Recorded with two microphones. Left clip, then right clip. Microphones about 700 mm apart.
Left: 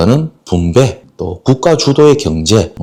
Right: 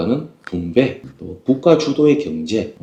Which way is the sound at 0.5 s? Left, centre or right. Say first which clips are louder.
Left 6 dB; left.